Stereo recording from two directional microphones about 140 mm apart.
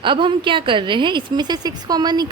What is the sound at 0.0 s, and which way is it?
A woman's voice, 35° right (ahead or behind).